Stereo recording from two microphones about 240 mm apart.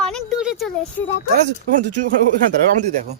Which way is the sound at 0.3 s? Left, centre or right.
Centre.